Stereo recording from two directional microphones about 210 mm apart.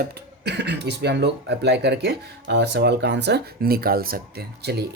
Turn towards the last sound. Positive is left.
turn(degrees=-50)  # may be behind; listen again after turning